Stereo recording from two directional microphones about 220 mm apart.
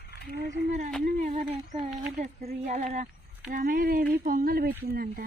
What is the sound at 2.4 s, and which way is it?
Speech, 35° right (ahead or behind).